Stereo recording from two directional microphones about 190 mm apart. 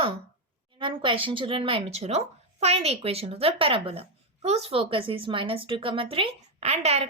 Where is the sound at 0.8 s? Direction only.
25° right (ahead or behind).